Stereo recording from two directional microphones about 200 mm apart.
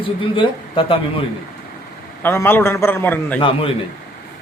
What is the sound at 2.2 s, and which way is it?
A man's voice, 10° left (ahead or behind).